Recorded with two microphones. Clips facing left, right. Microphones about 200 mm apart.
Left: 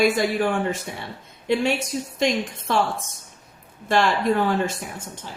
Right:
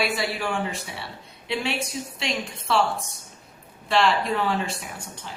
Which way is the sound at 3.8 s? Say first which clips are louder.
Left 2 dB; 45° left (ahead or behind).